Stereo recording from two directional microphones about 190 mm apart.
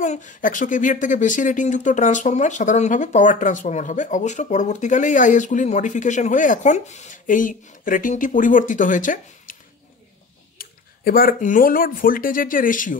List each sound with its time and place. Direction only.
0.0 s speech: 40° left (ahead or behind)
10.6 s speech: 50° left (ahead or behind)